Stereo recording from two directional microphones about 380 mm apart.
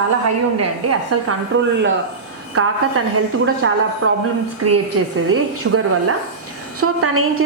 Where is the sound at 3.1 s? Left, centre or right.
Right.